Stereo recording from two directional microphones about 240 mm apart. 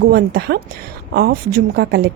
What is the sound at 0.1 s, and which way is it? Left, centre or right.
A woman's voice, right.